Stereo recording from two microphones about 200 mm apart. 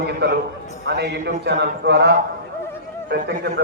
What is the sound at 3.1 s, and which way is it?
Speech, 50° right (ahead or behind).